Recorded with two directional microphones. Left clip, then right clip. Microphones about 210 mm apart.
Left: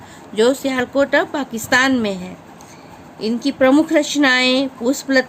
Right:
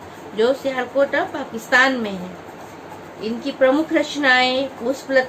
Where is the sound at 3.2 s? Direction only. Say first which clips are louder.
Left 2 dB; 55° left (ahead or behind).